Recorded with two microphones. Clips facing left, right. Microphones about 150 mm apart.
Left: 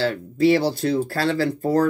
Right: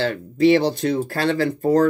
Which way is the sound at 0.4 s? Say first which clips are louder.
Right 2 dB; 20° right (ahead or behind).